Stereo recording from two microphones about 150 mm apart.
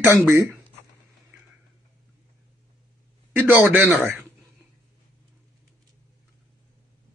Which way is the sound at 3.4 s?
10° right (ahead or behind).